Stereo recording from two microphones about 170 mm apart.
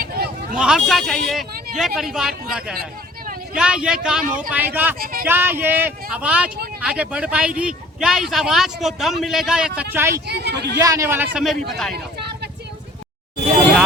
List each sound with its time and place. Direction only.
0.0 s a sound: 60° right (ahead or behind)
0.6 s speech: centre (ahead or behind)
9.9 s speech: 15° right (ahead or behind)
10.2 s speech: 75° right (ahead or behind)
10.8 s speech: 20° right (ahead or behind)